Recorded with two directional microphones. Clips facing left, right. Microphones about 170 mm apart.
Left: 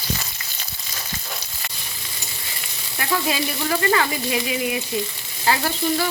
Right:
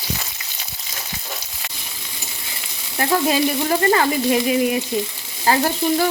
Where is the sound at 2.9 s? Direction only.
35° right (ahead or behind).